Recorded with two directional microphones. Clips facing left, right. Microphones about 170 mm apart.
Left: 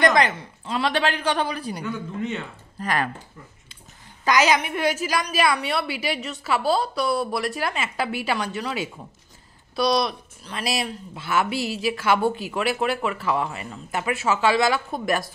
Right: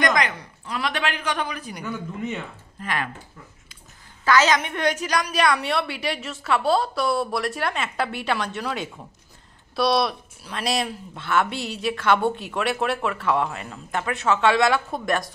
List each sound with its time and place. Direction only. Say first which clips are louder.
0.0 s a woman's voice: left 3 dB; 30° left (ahead or behind)
4.2 s a woman's voice: even; 15° left (ahead or behind)